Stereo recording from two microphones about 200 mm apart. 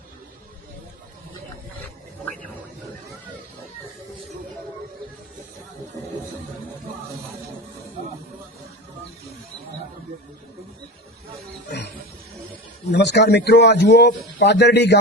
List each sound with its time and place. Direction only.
12.9 s a man's voice: 60° left (ahead or behind)